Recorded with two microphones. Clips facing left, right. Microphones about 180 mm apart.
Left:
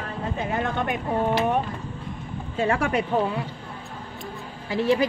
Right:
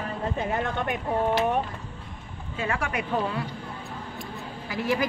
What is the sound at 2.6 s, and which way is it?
Speech, 35° left (ahead or behind).